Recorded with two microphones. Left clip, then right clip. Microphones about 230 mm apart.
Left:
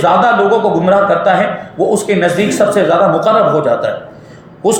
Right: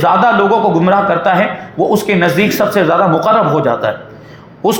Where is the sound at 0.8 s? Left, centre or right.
Right.